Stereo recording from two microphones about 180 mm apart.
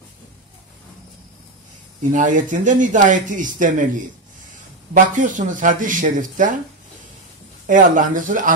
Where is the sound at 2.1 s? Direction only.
45° right (ahead or behind).